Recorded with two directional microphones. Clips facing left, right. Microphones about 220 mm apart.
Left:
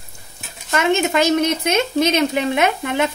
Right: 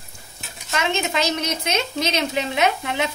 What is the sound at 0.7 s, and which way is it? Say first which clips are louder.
Speech: left 6 dB; 50° left (ahead or behind).